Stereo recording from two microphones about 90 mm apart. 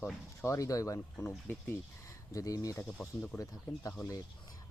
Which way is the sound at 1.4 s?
20° left (ahead or behind).